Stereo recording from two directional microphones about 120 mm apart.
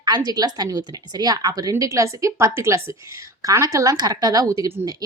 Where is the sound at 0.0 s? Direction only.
35° right (ahead or behind).